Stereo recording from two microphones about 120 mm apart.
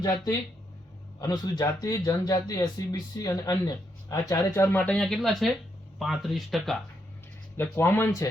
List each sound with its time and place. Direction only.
0.0 s speech: 30° left (ahead or behind)
4.9 s speech: 5° left (ahead or behind)
7.5 s speech: 20° left (ahead or behind)